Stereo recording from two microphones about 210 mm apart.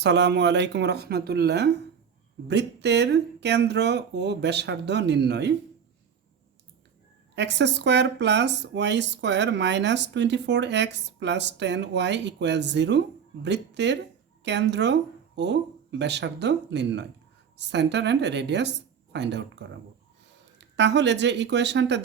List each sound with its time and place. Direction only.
0.0 s speech: 55° right (ahead or behind)
7.3 s speech: 55° right (ahead or behind)
20.6 s speech: 55° right (ahead or behind)